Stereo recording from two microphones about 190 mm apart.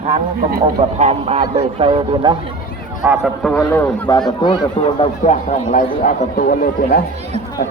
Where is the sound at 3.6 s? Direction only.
15° left (ahead or behind); by 7.0 s 50° left (ahead or behind).